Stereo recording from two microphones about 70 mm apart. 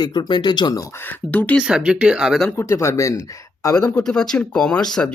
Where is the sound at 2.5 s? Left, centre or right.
Left.